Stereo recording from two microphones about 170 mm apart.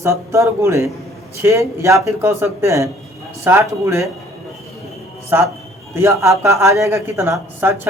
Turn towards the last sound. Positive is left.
turn(degrees=-15)  # may be behind; listen again after turning